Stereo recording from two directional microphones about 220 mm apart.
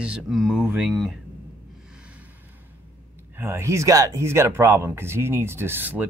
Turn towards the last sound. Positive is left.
turn(degrees=-10)  # may be behind; listen again after turning